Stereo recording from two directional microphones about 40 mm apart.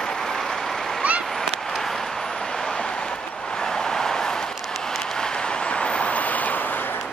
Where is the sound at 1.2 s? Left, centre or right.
Centre.